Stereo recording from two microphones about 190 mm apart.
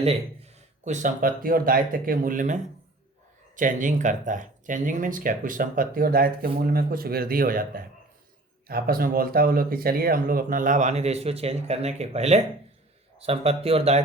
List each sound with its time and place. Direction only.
0.9 s speech: 45° right (ahead or behind)